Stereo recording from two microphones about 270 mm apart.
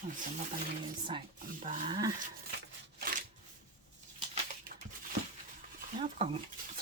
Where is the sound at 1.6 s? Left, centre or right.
Right.